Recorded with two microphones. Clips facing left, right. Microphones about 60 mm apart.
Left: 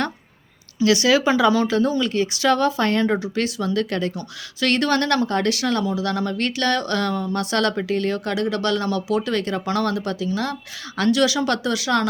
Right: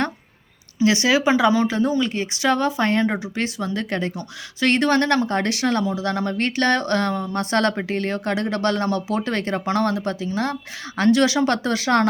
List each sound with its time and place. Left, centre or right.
0.8 s speech: right